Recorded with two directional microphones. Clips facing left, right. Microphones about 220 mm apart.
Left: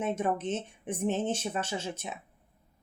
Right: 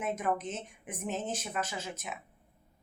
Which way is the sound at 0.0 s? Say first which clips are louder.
Left 3 dB; 30° left (ahead or behind).